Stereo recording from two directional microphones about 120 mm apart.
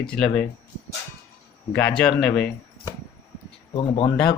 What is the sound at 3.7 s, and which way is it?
Speech, 45° left (ahead or behind).